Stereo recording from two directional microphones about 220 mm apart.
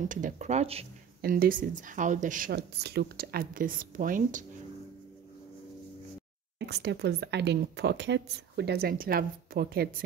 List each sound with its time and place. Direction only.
0.1 s speech: 35° right (ahead or behind)
1.2 s speech: 40° right (ahead or behind)
6.6 s a woman's voice: 50° right (ahead or behind)